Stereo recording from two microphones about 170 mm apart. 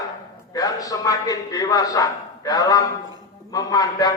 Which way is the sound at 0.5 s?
20° left (ahead or behind).